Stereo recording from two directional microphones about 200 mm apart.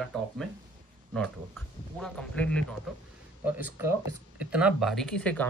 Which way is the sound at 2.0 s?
5° left (ahead or behind).